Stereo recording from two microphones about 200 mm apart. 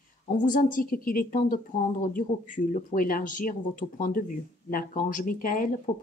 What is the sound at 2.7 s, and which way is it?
Speech, 45° left (ahead or behind).